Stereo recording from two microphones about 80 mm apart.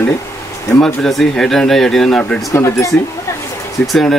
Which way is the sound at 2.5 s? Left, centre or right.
Left.